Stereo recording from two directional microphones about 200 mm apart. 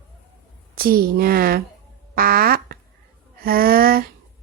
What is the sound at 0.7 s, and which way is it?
Speech, 45° right (ahead or behind).